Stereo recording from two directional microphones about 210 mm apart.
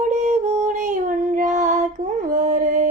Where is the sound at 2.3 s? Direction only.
35° right (ahead or behind).